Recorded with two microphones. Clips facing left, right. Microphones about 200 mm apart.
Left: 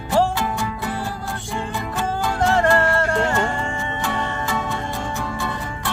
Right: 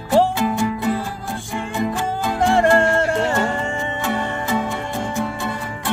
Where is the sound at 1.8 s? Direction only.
20° right (ahead or behind).